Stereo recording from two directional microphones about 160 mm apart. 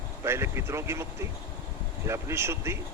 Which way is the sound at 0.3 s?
15° right (ahead or behind).